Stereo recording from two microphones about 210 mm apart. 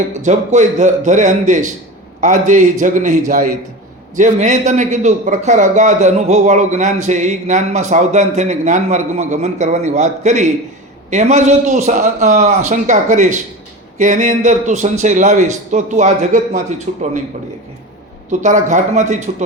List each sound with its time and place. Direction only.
0.2 s a man's voice: 35° right (ahead or behind)
18.3 s a man's voice: 35° right (ahead or behind)